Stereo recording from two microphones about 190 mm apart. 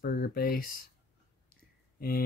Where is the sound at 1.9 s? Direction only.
50° left (ahead or behind).